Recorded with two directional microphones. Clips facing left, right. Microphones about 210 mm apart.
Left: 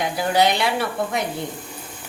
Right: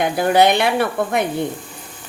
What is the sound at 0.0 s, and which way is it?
Speech, 55° right (ahead or behind).